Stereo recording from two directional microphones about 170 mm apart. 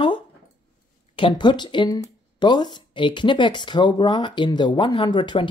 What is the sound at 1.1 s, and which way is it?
Speech, 30° left (ahead or behind).